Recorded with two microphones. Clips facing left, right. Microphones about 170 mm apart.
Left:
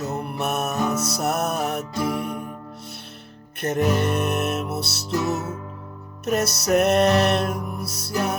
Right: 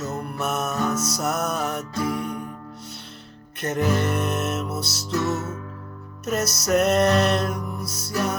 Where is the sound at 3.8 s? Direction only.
15° left (ahead or behind).